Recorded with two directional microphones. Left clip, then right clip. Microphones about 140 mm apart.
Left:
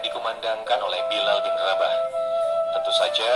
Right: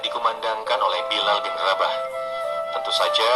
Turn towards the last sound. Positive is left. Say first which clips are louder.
# right 1 dB
turn(degrees=-80)